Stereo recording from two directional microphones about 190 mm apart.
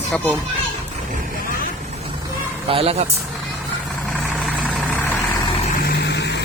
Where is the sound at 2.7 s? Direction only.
30° right (ahead or behind).